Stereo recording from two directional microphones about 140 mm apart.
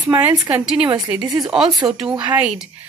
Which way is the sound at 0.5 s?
5° right (ahead or behind).